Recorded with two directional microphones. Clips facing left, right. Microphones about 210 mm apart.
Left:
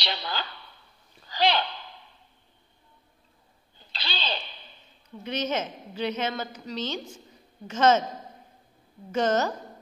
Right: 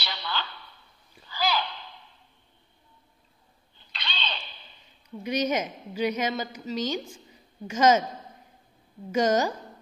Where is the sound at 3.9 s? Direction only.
35° left (ahead or behind).